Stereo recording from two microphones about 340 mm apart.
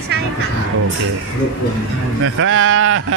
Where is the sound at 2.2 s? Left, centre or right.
Right.